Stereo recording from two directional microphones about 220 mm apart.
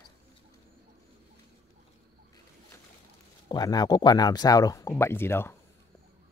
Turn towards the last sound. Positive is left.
turn(degrees=10)  # may be behind; listen again after turning